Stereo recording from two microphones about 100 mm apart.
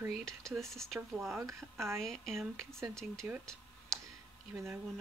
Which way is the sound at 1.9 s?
5° left (ahead or behind).